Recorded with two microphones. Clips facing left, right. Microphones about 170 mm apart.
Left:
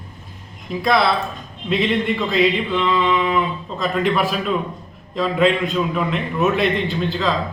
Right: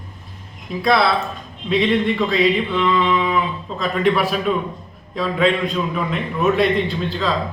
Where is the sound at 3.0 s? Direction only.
Centre (ahead or behind).